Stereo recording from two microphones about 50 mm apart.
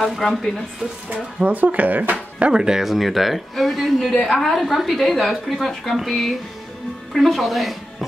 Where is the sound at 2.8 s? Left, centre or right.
Centre.